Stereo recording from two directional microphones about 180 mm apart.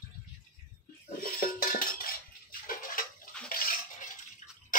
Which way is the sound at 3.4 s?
55° left (ahead or behind).